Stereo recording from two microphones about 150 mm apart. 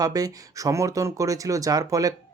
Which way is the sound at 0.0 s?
25° right (ahead or behind).